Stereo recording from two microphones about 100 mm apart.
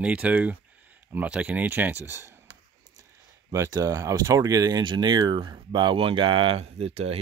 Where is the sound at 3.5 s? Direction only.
35° right (ahead or behind); by 7.1 s 90° right.